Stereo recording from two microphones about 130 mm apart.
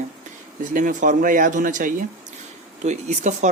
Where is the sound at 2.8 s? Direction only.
65° right (ahead or behind).